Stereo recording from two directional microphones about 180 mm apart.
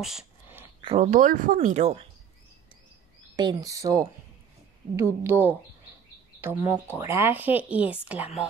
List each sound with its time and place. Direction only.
0.0 s a sound: 5° right (ahead or behind)
0.7 s speech: 35° right (ahead or behind)
3.3 s speech: 25° right (ahead or behind); by 8.0 s 10° right (ahead or behind)